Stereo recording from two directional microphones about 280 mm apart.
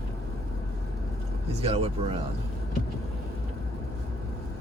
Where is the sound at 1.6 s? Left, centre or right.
Right.